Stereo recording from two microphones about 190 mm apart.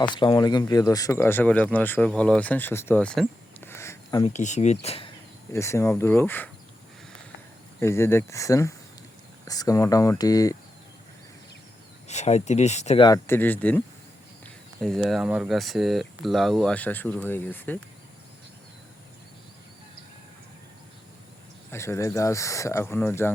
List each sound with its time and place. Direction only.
0.0 s speech: 25° left (ahead or behind)
4.3 s speech: 40° left (ahead or behind)
5.5 s speech: 15° left (ahead or behind)
7.8 s speech: 15° left (ahead or behind)
12.0 s speech: 35° left (ahead or behind)
13.0 s speech: 15° left (ahead or behind)
21.7 s speech: 15° left (ahead or behind)